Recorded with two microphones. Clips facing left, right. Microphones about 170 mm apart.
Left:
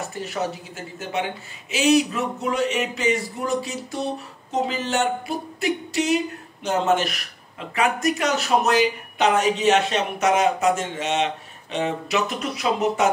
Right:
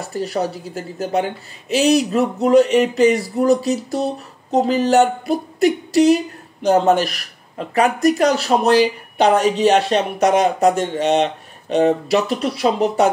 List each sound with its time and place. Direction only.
0.1 s speech: 35° right (ahead or behind)